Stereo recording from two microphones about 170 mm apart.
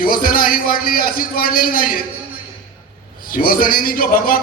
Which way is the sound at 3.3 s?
55° left (ahead or behind).